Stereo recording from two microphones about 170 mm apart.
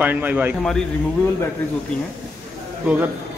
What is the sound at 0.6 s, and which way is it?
Speech, 5° left (ahead or behind).